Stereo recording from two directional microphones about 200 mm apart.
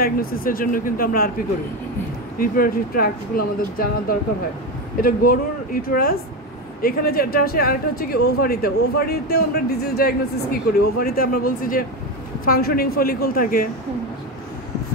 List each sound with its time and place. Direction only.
0.0 s speech: 45° left (ahead or behind)
2.3 s speech: 45° left (ahead or behind)